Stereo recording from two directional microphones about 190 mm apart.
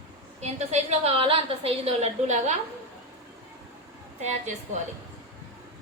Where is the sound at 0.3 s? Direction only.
35° right (ahead or behind).